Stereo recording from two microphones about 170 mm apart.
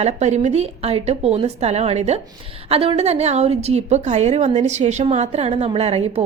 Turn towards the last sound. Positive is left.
turn(degrees=-35)  # may be behind; listen again after turning